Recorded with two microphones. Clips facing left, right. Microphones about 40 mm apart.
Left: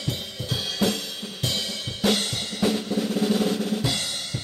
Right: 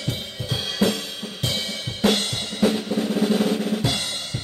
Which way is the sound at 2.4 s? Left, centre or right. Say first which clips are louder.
Right 3 dB; centre.